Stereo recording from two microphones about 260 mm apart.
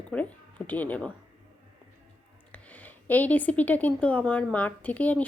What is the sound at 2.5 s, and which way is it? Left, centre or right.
Speech, centre.